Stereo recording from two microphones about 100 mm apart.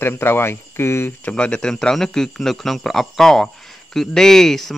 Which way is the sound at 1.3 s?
10° left (ahead or behind).